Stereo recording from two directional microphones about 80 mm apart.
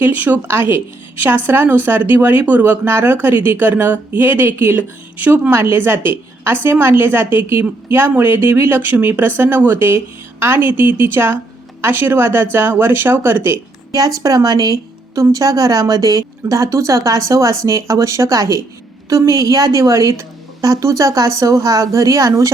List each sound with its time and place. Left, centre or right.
0.0 s a woman's voice: right
14.2 s speech: right